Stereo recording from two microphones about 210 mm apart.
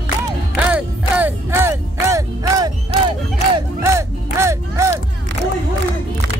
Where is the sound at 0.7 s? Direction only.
5° right (ahead or behind).